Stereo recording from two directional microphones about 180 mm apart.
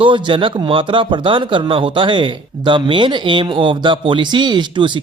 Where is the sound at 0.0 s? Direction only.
30° right (ahead or behind).